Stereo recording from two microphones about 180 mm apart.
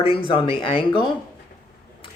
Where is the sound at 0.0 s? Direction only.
30° left (ahead or behind).